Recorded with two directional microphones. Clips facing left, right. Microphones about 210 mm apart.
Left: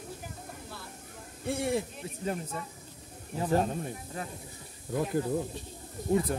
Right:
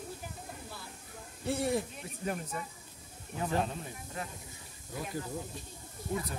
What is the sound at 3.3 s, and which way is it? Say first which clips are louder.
Speech: left 5 dB; 35° left (ahead or behind).